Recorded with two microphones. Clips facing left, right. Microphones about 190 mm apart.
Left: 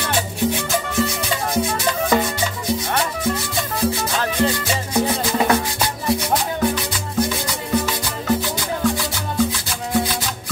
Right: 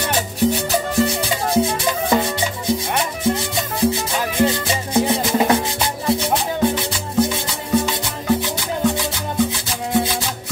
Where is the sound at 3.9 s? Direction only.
20° right (ahead or behind).